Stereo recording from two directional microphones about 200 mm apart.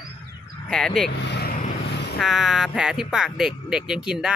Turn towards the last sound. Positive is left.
turn(degrees=-5)  # may be behind; listen again after turning